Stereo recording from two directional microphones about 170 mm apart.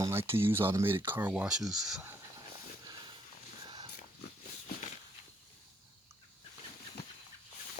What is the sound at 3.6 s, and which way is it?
Pig, 30° right (ahead or behind).